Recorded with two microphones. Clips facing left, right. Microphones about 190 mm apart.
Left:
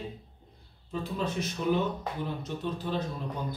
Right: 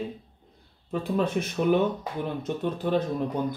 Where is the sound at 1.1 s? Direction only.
55° right (ahead or behind).